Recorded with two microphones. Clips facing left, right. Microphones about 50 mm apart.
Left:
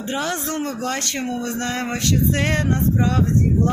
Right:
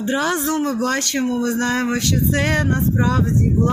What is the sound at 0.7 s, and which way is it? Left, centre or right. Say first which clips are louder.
Speech: right 5 dB; left.